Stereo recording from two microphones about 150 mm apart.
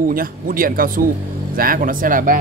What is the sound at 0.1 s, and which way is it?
Speech, 70° right (ahead or behind).